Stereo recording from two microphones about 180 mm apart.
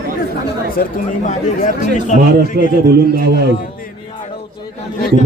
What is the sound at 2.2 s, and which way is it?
A man's voice, 55° right (ahead or behind).